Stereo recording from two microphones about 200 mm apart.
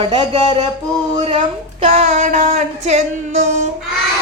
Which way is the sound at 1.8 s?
30° right (ahead or behind).